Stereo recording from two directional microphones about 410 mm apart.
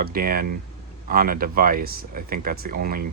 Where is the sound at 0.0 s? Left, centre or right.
Right.